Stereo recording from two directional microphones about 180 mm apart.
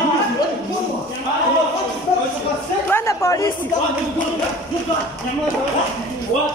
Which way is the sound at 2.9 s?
15° left (ahead or behind).